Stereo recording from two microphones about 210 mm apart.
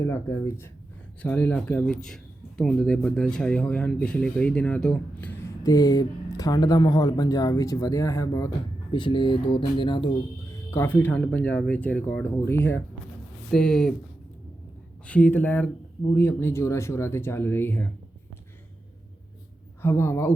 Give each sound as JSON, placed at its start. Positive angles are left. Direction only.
{"t": 0.0, "sound": "speech", "side_deg": 15}
{"t": 10.7, "sound": "speech", "side_deg": 10}
{"t": 15.0, "sound": "speech", "side_deg": 5}
{"t": 19.8, "sound": "speech", "side_deg": 10}